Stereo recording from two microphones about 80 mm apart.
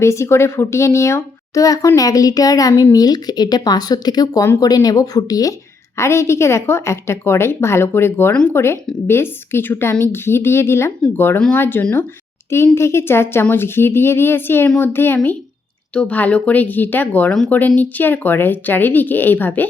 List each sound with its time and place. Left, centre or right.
0.0 s a woman's voice: left
6.0 s a woman's voice: left